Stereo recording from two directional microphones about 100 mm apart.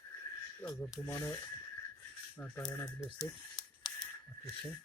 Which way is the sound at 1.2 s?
35° left (ahead or behind).